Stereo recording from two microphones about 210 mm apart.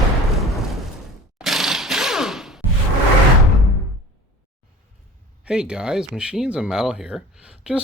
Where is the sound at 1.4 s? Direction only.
Centre (ahead or behind).